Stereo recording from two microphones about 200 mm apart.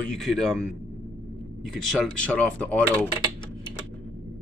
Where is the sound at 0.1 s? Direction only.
Centre (ahead or behind).